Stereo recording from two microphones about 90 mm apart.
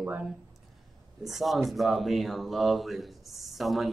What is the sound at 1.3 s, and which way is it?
Speech, centre (ahead or behind).